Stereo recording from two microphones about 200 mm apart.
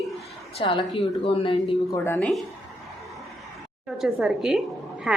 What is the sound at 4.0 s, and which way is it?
A woman's voice, centre (ahead or behind).